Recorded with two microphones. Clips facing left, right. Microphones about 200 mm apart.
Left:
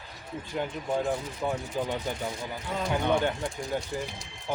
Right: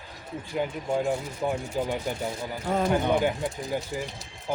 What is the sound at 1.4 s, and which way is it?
Speech, 10° right (ahead or behind).